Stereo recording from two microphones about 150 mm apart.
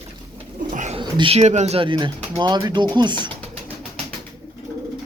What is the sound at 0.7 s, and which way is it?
Bird, 55° right (ahead or behind).